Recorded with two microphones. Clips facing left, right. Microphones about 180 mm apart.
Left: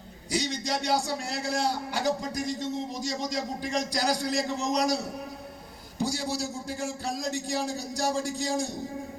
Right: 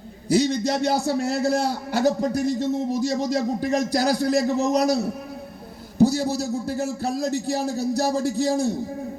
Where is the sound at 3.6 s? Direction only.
50° right (ahead or behind).